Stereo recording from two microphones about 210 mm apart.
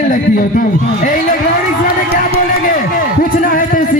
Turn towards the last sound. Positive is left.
turn(degrees=40)  # may be behind; listen again after turning